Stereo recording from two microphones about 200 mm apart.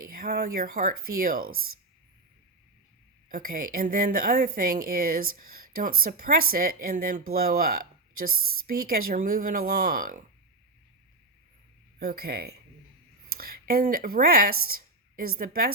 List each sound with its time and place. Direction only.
0.0 s a woman's voice: 45° right (ahead or behind)
3.2 s a woman's voice: 45° right (ahead or behind)
11.9 s a woman's voice: 50° right (ahead or behind)